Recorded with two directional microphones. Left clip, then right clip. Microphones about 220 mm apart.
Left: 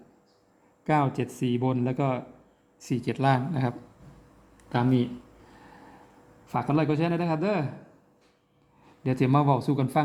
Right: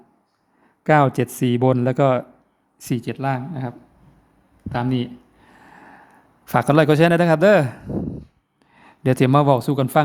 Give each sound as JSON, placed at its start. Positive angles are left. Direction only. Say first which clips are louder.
{"t": 0.9, "sound": "speech", "louder": "right 9 dB", "side_deg": -25}
{"t": 3.1, "sound": "speech", "louder": "left 2 dB", "side_deg": -5}
{"t": 6.4, "sound": "a man's voice", "louder": "right 11 dB", "side_deg": -30}
{"t": 9.0, "sound": "speech", "louder": "right 8 dB", "side_deg": -30}